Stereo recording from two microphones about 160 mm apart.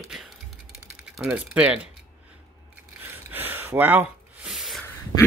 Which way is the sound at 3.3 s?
10° right (ahead or behind).